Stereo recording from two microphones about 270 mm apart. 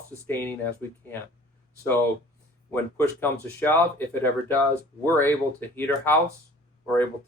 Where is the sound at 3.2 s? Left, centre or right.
Centre.